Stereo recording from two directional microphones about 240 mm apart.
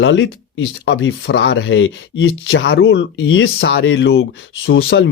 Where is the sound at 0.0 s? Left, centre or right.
Left.